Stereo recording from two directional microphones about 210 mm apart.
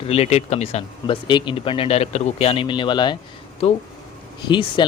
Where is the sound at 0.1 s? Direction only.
30° left (ahead or behind).